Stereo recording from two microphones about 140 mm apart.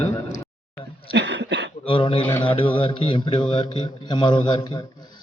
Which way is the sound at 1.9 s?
40° left (ahead or behind).